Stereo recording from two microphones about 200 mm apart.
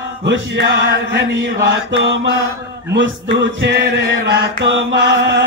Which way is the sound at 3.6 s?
60° right (ahead or behind).